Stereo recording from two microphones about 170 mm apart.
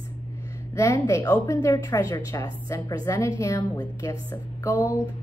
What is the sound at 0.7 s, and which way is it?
A woman's voice, 15° left (ahead or behind).